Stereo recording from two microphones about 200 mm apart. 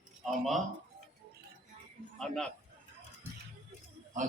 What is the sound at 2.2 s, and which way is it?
Speech, centre (ahead or behind).